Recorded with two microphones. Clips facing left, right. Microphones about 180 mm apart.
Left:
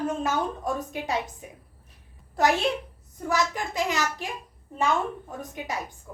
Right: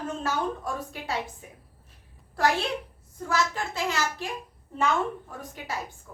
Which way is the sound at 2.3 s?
20° left (ahead or behind).